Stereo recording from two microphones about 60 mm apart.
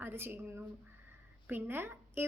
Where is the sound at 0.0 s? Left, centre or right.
Right.